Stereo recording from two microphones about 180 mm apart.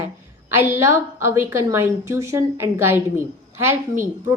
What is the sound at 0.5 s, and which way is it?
A woman's voice, 15° right (ahead or behind).